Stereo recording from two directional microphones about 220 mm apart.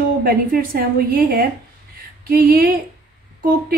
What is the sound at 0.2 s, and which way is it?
A woman's voice, 45° right (ahead or behind).